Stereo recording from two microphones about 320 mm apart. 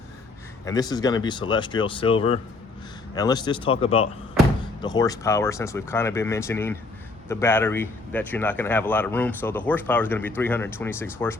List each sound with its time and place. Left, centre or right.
0.6 s speech: centre